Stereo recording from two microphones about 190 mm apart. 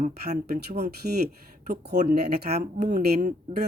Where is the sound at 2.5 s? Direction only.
35° right (ahead or behind).